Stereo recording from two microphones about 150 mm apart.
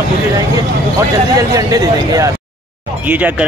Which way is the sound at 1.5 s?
25° right (ahead or behind).